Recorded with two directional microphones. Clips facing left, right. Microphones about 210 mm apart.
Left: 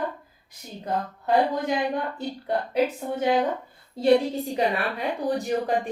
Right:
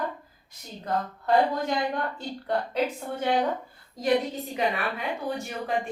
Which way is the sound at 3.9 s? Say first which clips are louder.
Left 5 dB; 30° left (ahead or behind).